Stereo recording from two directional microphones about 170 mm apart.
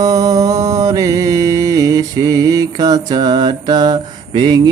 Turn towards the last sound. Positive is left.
turn(degrees=-25)  # may be behind; listen again after turning